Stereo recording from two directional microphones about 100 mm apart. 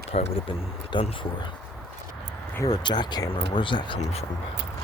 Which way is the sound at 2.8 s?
45° left (ahead or behind).